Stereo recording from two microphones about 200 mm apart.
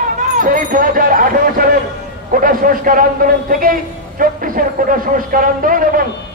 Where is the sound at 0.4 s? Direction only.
45° right (ahead or behind).